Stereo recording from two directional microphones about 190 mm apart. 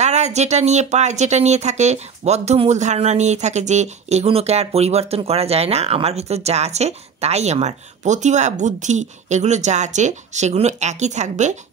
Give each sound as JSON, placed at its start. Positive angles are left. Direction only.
{"t": 0.0, "sound": "speech", "side_deg": -35}